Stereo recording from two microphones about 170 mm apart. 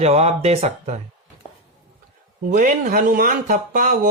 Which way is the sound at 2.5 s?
50° right (ahead or behind).